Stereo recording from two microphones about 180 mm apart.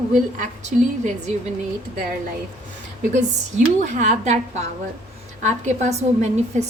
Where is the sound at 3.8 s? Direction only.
40° right (ahead or behind).